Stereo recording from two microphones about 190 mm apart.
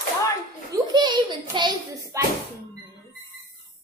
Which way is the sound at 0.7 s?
20° right (ahead or behind).